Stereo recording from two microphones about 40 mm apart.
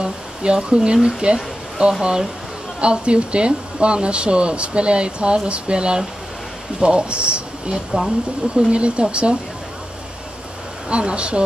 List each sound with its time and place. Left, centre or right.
0.0 s a sound: right
0.6 s speech: right
10.9 s speech: right